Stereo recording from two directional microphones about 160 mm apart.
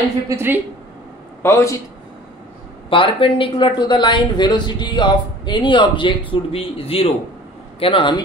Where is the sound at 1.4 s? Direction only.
15° left (ahead or behind).